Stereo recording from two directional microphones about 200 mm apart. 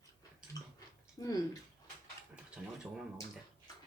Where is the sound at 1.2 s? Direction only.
20° left (ahead or behind).